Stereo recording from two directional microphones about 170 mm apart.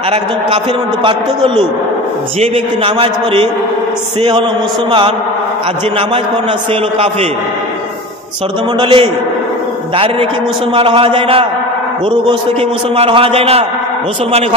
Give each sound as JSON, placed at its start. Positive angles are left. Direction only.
{"t": 1.0, "sound": "a man's voice", "side_deg": -30}
{"t": 8.7, "sound": "a man's voice", "side_deg": -30}
{"t": 10.7, "sound": "a man's voice", "side_deg": -30}
{"t": 12.9, "sound": "a man's voice", "side_deg": -35}